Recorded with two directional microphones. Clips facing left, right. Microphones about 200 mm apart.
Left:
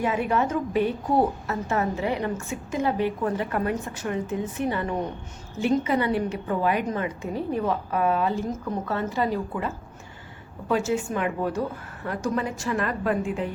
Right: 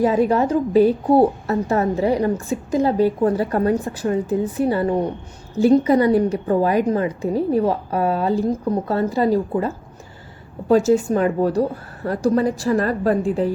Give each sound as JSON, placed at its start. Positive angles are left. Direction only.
{"t": 0.0, "sound": "a woman's voice", "side_deg": -35}